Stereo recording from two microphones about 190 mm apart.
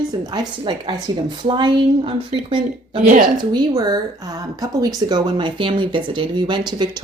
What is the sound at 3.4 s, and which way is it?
Speech, 20° right (ahead or behind).